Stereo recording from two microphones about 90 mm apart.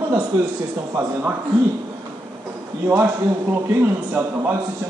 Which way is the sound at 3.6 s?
25° right (ahead or behind).